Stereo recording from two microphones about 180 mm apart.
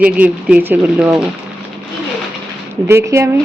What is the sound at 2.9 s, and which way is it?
Speech, 15° right (ahead or behind).